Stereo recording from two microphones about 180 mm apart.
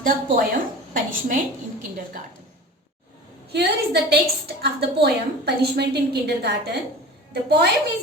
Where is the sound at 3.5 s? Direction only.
65° right (ahead or behind).